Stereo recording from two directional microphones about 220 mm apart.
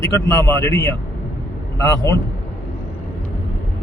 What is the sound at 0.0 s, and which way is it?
Speech, 15° left (ahead or behind).